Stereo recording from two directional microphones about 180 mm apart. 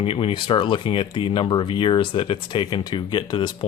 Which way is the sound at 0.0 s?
30° left (ahead or behind).